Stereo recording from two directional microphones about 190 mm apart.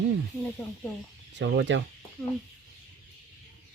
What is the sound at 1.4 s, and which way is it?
Speech, 70° right (ahead or behind).